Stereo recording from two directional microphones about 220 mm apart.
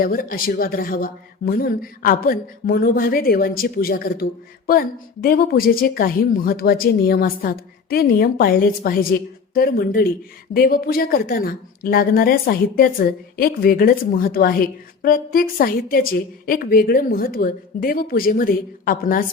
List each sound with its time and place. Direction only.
0.0 s speech: 40° left (ahead or behind)